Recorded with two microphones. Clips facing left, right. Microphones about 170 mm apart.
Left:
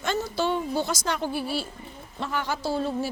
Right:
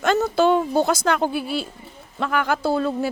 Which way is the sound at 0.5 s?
65° right (ahead or behind).